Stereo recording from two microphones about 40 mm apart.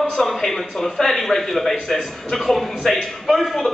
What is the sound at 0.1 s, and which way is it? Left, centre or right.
A man's voice, centre.